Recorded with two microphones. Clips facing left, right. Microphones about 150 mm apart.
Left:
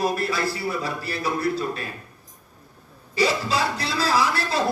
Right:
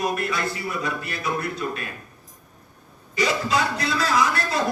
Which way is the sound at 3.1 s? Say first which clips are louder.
Even; 30° left (ahead or behind).